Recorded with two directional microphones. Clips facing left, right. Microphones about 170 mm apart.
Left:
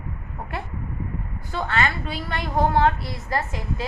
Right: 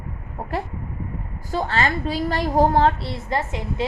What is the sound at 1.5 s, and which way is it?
A woman's voice, 35° right (ahead or behind).